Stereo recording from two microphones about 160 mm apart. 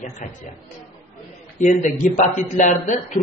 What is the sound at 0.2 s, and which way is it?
Speech, 55° left (ahead or behind).